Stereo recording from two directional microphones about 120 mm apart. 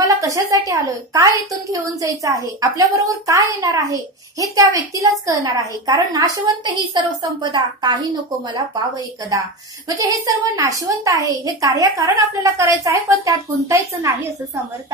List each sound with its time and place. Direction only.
0.0 s a woman's voice: 25° right (ahead or behind)